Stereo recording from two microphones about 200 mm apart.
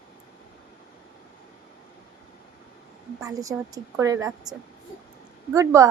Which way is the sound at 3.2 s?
15° right (ahead or behind).